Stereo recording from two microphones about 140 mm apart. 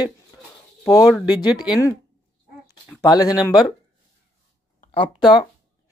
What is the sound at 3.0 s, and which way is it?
Speech, 30° left (ahead or behind).